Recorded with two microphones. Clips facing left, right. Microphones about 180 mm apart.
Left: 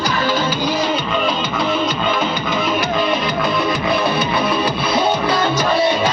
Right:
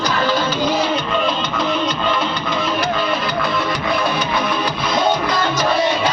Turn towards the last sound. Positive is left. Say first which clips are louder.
# left 2 dB
turn(degrees=5)  # may be behind; listen again after turning